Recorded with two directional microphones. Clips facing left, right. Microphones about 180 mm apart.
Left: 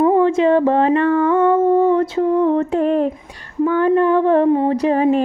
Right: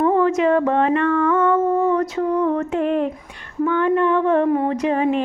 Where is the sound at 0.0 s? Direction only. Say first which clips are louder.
Left 3 dB; 25° left (ahead or behind).